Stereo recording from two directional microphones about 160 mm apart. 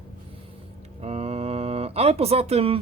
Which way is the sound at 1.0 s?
40° right (ahead or behind).